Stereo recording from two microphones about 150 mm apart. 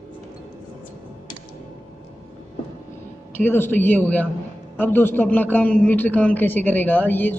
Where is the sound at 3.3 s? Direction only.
15° left (ahead or behind).